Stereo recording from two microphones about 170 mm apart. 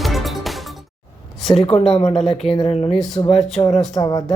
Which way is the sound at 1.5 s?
35° left (ahead or behind).